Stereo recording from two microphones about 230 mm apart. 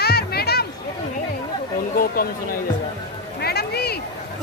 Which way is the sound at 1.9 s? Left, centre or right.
Left.